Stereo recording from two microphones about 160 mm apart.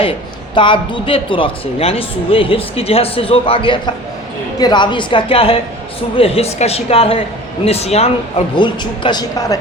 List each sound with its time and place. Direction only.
0.5 s speech: 30° left (ahead or behind)